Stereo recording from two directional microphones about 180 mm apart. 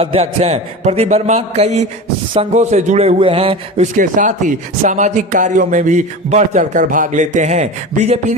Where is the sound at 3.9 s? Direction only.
45° right (ahead or behind).